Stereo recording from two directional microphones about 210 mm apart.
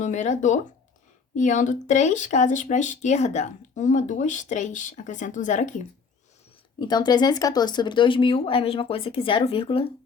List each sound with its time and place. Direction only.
0.0 s speech: 35° left (ahead or behind)
6.7 s speech: 20° left (ahead or behind)